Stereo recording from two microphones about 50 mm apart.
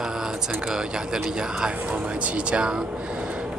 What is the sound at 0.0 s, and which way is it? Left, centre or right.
Speech, centre.